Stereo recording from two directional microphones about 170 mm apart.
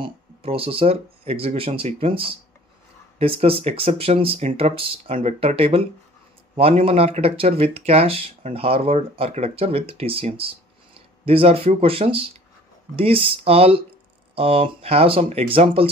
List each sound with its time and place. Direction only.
0.0 s speech: 35° right (ahead or behind)